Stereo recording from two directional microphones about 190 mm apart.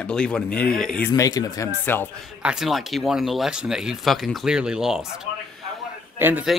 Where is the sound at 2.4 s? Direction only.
Centre (ahead or behind).